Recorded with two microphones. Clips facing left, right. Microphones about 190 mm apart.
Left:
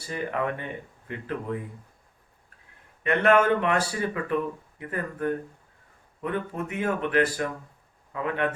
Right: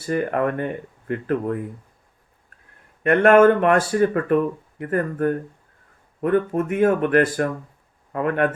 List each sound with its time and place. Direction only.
0.0 s speech: 50° right (ahead or behind)
3.0 s speech: 50° right (ahead or behind)